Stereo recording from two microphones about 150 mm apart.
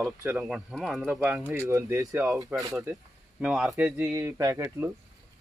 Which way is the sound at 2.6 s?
20° right (ahead or behind).